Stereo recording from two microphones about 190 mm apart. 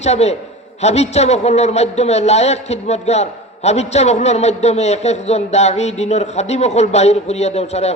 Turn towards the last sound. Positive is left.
turn(degrees=35)  # may be behind; listen again after turning